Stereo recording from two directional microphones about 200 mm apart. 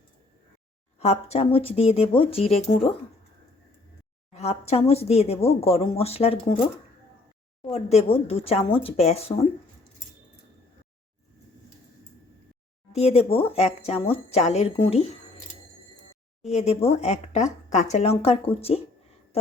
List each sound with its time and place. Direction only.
0.9 s speech: 30° left (ahead or behind)
4.3 s speech: 30° left (ahead or behind)
7.7 s speech: 30° left (ahead or behind)
12.9 s speech: 30° left (ahead or behind)
16.5 s speech: 35° left (ahead or behind)